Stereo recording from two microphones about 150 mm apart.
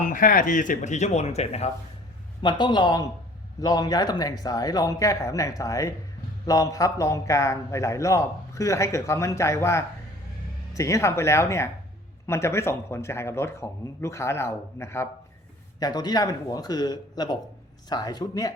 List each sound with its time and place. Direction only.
0.0 s speech: 65° left (ahead or behind); by 1.7 s 45° left (ahead or behind)
2.4 s a man's voice: 30° left (ahead or behind)